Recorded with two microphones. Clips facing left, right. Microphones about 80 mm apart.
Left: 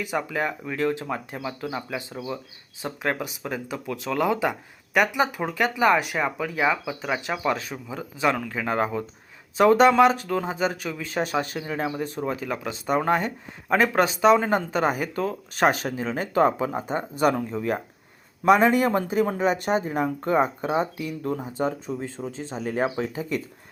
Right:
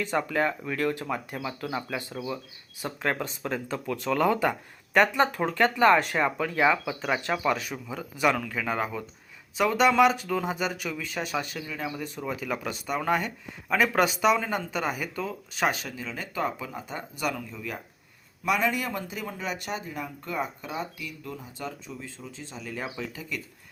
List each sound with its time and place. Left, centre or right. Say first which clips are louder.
0.0 s speech: even; centre
2.2 s speech: left 1 dB; centre
2.8 s speech: left 2 dB; centre; by 11.9 s left
11.9 s speech: left 5 dB; left